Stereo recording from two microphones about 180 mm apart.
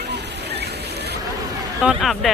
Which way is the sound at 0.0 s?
70° right (ahead or behind).